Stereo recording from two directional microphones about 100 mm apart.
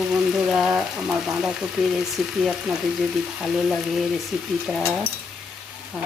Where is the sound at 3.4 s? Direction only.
5° right (ahead or behind).